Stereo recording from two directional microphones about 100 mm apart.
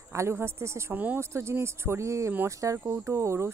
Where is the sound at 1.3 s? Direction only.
25° right (ahead or behind).